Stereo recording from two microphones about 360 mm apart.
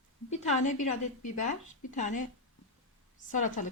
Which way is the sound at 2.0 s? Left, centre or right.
Centre.